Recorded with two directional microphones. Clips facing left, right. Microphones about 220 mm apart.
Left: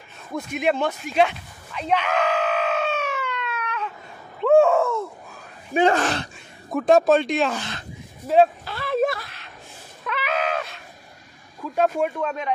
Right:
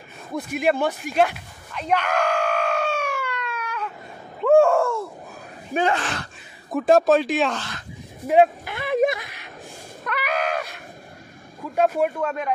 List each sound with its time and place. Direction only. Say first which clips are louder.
0.5 s speech: right 1 dB; 5° right (ahead or behind)
1.1 s screaming: left 2 dB; 5° right (ahead or behind)
4.4 s a sound: even; centre (ahead or behind)
5.9 s speech: left 6 dB; 40° left (ahead or behind)
6.7 s speech: even; centre (ahead or behind)
7.5 s speech: left 1 dB; 20° left (ahead or behind)
8.3 s a sound: even; 15° right (ahead or behind)
10.0 s a sound: even; 5° right (ahead or behind)
11.7 s speech: right 1 dB; 5° right (ahead or behind)